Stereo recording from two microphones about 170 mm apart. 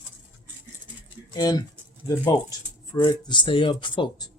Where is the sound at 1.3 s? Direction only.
25° left (ahead or behind).